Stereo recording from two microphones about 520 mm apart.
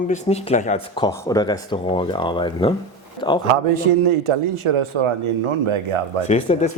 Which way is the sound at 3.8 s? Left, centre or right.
Right.